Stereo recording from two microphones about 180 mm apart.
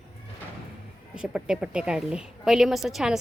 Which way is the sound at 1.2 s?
5° right (ahead or behind).